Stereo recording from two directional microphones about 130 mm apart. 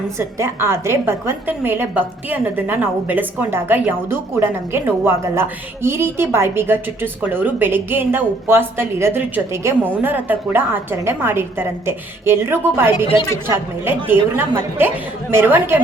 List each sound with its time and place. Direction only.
0.2 s a woman's voice: 20° right (ahead or behind)